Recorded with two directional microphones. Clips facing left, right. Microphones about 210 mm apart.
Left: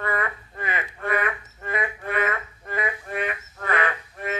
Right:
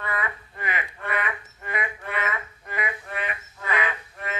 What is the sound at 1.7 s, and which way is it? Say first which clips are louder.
Music: left 3 dB; 50° left (ahead or behind).